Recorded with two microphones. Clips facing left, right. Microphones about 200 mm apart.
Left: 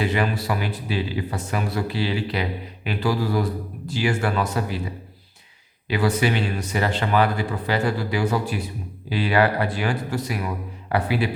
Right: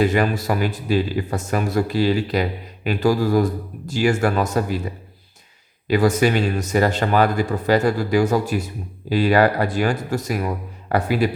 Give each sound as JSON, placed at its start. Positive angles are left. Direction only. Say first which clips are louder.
{"t": 0.0, "sound": "speech", "louder": "right 5 dB", "side_deg": -45}
{"t": 5.9, "sound": "speech", "louder": "right 5 dB", "side_deg": -45}